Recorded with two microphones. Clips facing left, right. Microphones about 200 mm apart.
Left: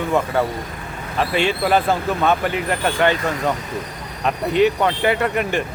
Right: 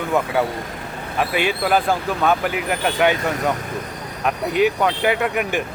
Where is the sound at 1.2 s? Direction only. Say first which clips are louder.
Left 1 dB; 5° right (ahead or behind).